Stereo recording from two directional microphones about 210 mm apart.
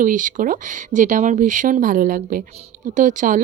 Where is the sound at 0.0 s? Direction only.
40° right (ahead or behind).